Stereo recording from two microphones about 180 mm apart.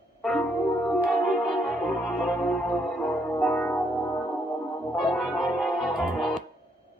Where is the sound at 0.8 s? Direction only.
5° left (ahead or behind).